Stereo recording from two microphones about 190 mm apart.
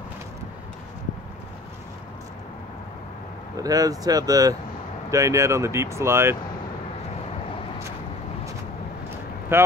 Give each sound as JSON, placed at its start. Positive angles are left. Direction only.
{"t": 3.5, "sound": "speech", "side_deg": -20}
{"t": 9.5, "sound": "speech", "side_deg": -10}